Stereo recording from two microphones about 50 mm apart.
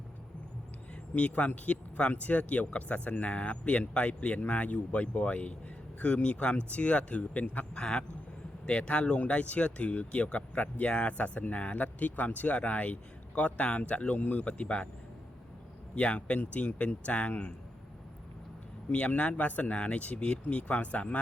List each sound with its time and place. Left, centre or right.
1.1 s speech: left
16.0 s speech: left
18.9 s speech: left